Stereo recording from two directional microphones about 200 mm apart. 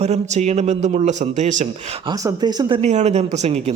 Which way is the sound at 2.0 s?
20° right (ahead or behind).